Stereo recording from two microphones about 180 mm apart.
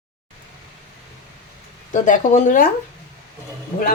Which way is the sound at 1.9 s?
45° left (ahead or behind).